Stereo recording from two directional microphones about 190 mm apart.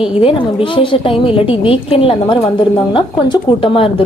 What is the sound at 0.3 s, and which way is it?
A woman's voice, 25° left (ahead or behind).